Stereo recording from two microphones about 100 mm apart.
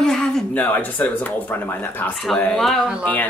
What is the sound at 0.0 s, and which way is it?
Speech, 5° left (ahead or behind).